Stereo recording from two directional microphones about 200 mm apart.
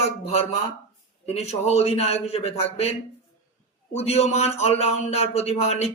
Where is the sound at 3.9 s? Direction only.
30° left (ahead or behind).